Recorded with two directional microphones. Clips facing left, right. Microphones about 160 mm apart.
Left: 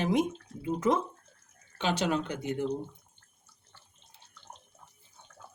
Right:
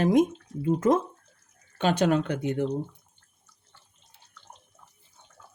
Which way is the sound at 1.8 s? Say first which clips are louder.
Right 6 dB; 50° right (ahead or behind).